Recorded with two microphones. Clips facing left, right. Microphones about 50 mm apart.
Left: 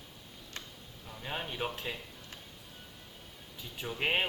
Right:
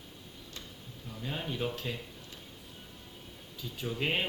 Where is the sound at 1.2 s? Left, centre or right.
Left.